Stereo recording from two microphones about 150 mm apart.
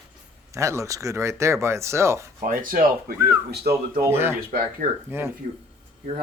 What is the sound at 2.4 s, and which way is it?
Speech, 65° right (ahead or behind).